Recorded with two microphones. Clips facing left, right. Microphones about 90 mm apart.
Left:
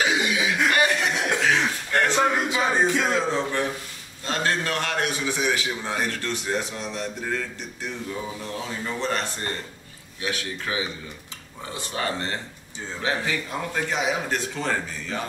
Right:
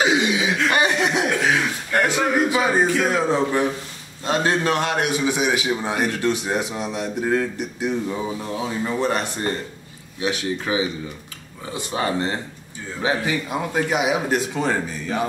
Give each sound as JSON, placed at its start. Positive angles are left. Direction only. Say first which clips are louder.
{"t": 0.0, "sound": "chuckle", "louder": "right 4 dB", "side_deg": -20}
{"t": 1.4, "sound": "a sound", "louder": "right 2 dB", "side_deg": -15}
{"t": 3.1, "sound": "a man's voice", "louder": "right 4 dB", "side_deg": -15}